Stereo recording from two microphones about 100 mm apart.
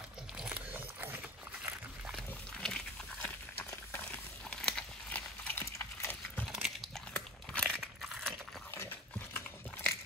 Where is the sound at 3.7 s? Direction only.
20° left (ahead or behind).